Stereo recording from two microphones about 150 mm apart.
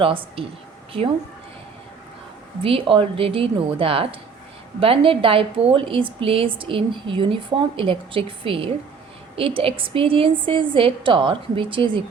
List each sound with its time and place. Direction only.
0.0 s a woman's voice: 35° right (ahead or behind)
2.6 s a woman's voice: 35° right (ahead or behind)